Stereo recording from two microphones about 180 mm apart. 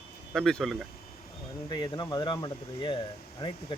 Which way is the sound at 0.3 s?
Centre (ahead or behind).